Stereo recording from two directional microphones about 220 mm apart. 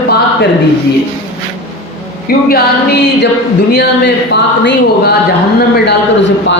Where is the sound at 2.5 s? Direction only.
45° left (ahead or behind).